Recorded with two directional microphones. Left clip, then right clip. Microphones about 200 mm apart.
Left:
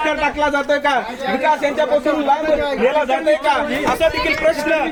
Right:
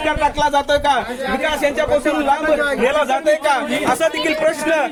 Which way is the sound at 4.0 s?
35° right (ahead or behind).